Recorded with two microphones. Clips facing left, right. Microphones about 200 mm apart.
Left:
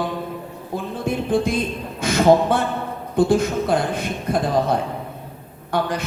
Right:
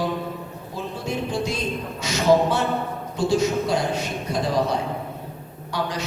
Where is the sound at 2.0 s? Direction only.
55° left (ahead or behind).